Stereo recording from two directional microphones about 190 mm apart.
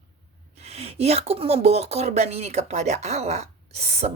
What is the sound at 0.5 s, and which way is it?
Speech, 35° right (ahead or behind).